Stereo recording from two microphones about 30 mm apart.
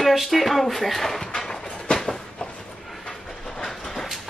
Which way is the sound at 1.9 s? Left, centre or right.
Centre.